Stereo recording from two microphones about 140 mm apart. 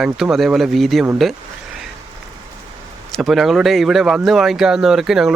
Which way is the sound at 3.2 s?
Centre (ahead or behind).